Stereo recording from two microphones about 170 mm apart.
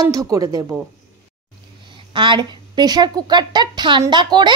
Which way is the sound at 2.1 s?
25° right (ahead or behind).